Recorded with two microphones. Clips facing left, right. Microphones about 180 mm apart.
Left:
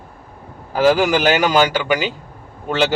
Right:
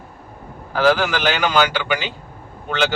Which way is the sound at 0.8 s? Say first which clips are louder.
Left 3 dB; 20° left (ahead or behind).